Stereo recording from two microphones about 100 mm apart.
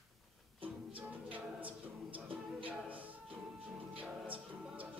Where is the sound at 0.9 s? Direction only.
15° right (ahead or behind).